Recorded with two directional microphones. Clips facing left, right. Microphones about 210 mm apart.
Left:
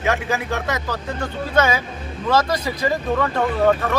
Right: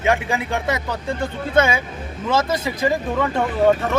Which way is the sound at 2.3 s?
20° right (ahead or behind).